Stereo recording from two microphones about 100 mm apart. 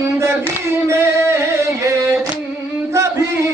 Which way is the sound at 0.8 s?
25° right (ahead or behind).